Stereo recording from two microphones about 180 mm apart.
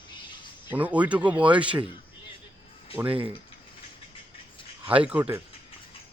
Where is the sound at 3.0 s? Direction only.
30° right (ahead or behind).